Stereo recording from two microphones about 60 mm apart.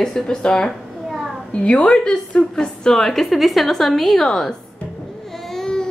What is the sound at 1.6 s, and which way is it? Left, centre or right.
A woman's voice, centre.